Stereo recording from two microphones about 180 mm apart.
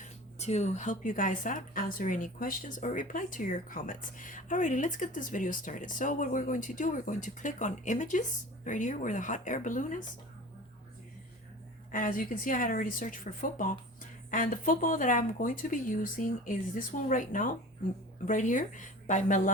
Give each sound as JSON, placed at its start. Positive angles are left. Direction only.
{"t": 0.0, "sound": "a woman's voice", "side_deg": 40}
{"t": 11.9, "sound": "a woman's voice", "side_deg": 50}